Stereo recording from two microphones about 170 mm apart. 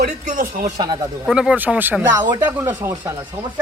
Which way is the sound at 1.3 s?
5° right (ahead or behind).